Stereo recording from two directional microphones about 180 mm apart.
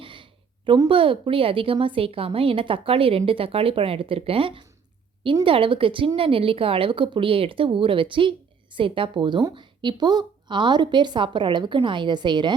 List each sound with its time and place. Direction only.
0.0 s a woman's voice: 30° right (ahead or behind)